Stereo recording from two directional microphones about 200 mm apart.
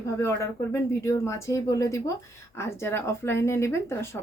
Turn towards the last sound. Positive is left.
turn(degrees=15)  # may be behind; listen again after turning